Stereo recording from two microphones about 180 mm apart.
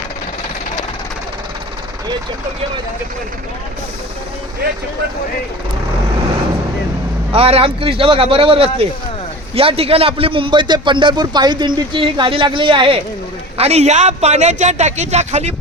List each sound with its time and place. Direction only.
7.3 s a man's voice: 30° right (ahead or behind)